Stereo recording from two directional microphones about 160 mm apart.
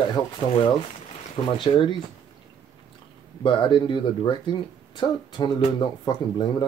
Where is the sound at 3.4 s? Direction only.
30° left (ahead or behind).